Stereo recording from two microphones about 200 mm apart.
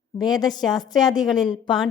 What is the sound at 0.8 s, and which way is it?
Speech, 20° left (ahead or behind).